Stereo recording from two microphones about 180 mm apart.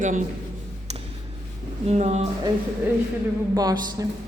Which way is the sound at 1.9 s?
40° right (ahead or behind).